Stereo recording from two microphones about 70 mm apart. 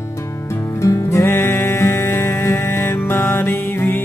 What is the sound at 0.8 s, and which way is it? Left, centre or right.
Music, left.